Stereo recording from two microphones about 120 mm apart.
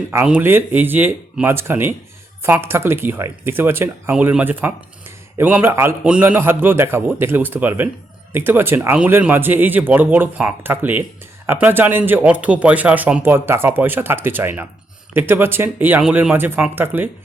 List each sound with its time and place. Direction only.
0.3 s speech: 15° right (ahead or behind)